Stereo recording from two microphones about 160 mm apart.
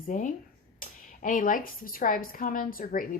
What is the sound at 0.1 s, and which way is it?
A woman's voice, 50° left (ahead or behind).